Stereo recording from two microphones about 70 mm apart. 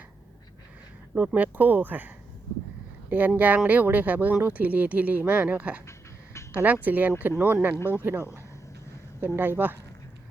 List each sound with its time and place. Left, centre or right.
1.1 s speech: right